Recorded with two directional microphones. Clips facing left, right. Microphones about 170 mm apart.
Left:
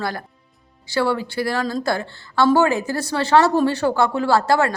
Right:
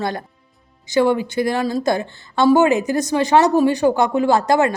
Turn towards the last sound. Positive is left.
turn(degrees=-20)  # may be behind; listen again after turning